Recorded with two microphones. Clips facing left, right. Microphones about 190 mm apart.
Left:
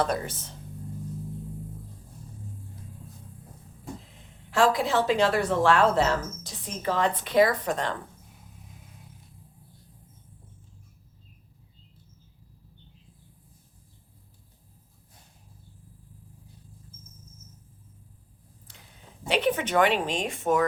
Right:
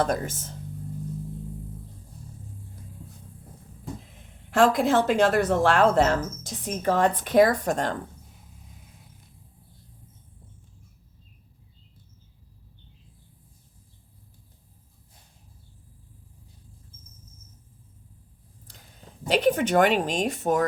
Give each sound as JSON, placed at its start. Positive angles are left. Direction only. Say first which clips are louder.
{"t": 0.0, "sound": "a woman's voice", "louder": "right 2 dB", "side_deg": -45}
{"t": 4.1, "sound": "a woman's voice", "louder": "right 3 dB", "side_deg": -50}
{"t": 19.3, "sound": "a woman's voice", "louder": "right 4 dB", "side_deg": -40}